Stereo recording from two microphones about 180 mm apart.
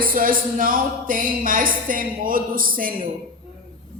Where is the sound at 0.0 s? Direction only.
50° right (ahead or behind).